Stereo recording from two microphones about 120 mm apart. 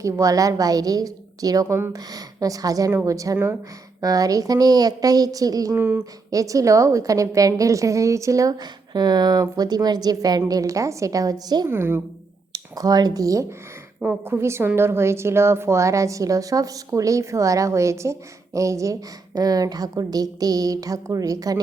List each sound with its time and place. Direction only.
0.0 s a woman's voice: 30° right (ahead or behind)
5.7 s speech: 15° right (ahead or behind)
6.3 s a woman's voice: 30° right (ahead or behind)
11.7 s a woman's voice: 20° right (ahead or behind)
12.5 s a woman's voice: 30° right (ahead or behind)
14.0 s a woman's voice: 15° right (ahead or behind); by 21.6 s 30° right (ahead or behind)